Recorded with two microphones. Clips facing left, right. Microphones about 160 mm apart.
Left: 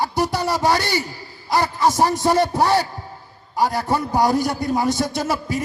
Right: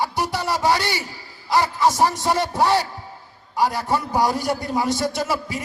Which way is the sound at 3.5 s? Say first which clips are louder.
Left 1 dB; 45° left (ahead or behind).